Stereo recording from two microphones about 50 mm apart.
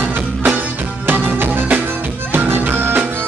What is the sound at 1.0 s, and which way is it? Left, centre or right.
Music, right.